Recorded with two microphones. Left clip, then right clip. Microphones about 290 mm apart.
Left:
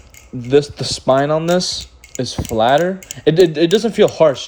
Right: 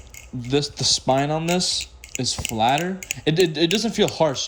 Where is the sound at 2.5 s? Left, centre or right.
Centre.